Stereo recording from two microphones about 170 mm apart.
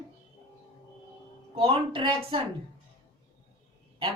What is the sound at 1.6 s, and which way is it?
Speech, 35° right (ahead or behind).